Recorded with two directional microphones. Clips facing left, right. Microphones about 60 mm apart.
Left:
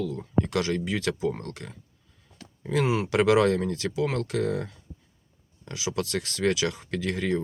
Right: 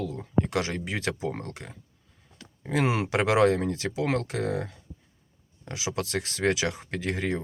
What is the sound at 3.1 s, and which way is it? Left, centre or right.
Speech, right.